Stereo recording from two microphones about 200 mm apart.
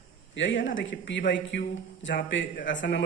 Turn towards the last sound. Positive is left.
turn(degrees=65)  # may be behind; listen again after turning